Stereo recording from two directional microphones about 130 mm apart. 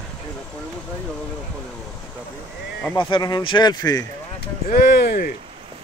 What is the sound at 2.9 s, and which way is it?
Speech, 35° left (ahead or behind).